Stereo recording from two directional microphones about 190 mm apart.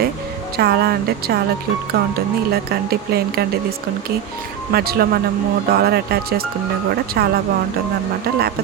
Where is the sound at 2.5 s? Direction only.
55° right (ahead or behind).